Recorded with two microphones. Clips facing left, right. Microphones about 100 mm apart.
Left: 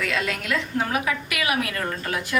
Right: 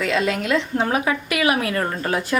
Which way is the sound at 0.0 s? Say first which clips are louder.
Right 6 dB; 25° right (ahead or behind).